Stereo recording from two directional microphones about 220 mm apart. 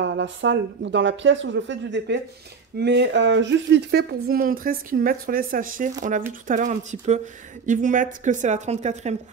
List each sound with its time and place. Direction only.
0.0 s speech: 55° right (ahead or behind); by 9.1 s 30° right (ahead or behind)